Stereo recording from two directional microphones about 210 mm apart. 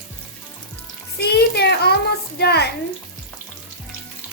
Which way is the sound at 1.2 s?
50° left (ahead or behind).